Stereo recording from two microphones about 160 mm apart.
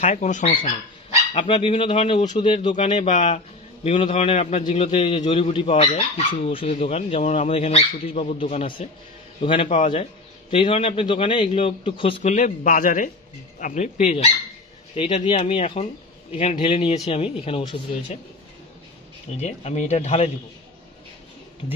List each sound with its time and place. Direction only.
0.0 s speech: 50° left (ahead or behind)
1.3 s speech: 35° left (ahead or behind)
2.0 s speech: 45° left (ahead or behind)
12.2 s speech: 50° left (ahead or behind)
19.3 s speech: 40° left (ahead or behind)